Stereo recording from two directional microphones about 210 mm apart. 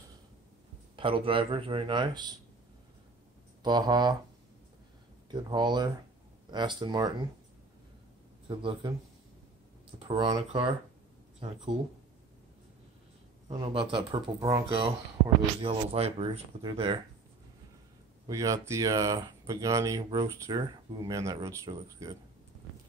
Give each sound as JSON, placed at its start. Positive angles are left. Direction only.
{"t": 0.9, "sound": "speech", "side_deg": -25}
{"t": 3.6, "sound": "speech", "side_deg": -20}
{"t": 5.3, "sound": "speech", "side_deg": -20}
{"t": 8.5, "sound": "speech", "side_deg": -25}
{"t": 10.0, "sound": "speech", "side_deg": -20}
{"t": 13.5, "sound": "speech", "side_deg": -20}
{"t": 18.2, "sound": "speech", "side_deg": -15}